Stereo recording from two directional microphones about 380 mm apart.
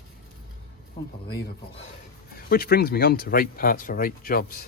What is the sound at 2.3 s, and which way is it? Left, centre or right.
Speech, left.